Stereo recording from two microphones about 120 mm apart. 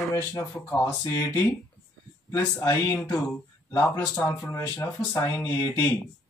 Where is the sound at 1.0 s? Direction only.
25° left (ahead or behind).